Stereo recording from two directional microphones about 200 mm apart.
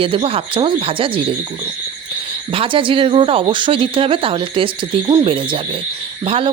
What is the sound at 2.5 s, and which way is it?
Speech, 25° right (ahead or behind).